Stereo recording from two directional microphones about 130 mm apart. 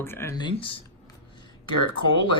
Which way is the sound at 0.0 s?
20° left (ahead or behind).